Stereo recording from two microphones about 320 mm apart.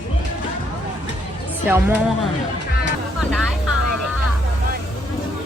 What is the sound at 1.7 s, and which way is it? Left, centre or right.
Speech, centre.